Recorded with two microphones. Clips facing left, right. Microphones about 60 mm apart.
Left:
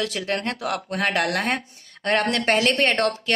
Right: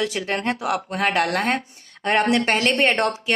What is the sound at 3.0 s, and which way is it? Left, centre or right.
Speech, centre.